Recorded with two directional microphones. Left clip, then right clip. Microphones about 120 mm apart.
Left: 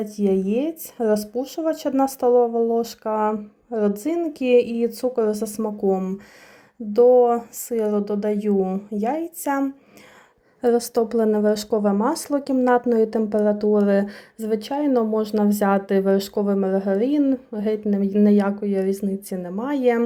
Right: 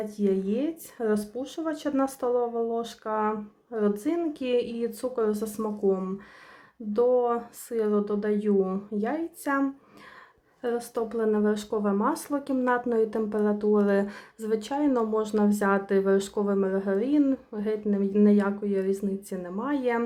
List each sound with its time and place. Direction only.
0.0 s speech: 35° left (ahead or behind); by 8.8 s 20° left (ahead or behind)
9.0 s speech: 30° left (ahead or behind)
10.6 s speech: 50° left (ahead or behind)